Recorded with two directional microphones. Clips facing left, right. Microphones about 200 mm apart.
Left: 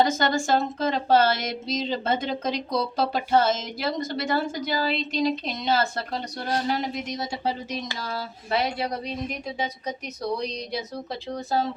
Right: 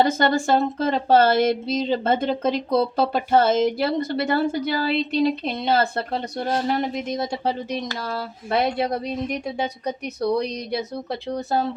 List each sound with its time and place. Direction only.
0.0 s speech: 55° right (ahead or behind)
10.3 s speech: 60° right (ahead or behind)